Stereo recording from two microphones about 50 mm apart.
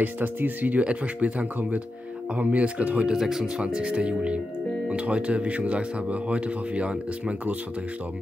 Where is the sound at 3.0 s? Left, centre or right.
Centre.